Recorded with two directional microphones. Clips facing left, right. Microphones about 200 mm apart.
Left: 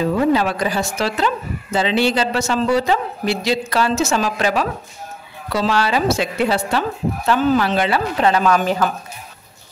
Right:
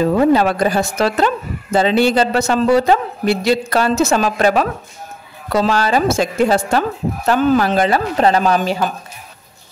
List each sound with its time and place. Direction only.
0.0 s speech: 45° right (ahead or behind); by 8.9 s 25° right (ahead or behind)